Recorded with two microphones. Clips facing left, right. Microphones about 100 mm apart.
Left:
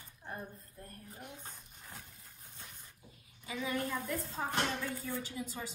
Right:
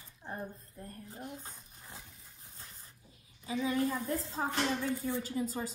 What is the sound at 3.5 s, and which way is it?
Speech, 30° right (ahead or behind).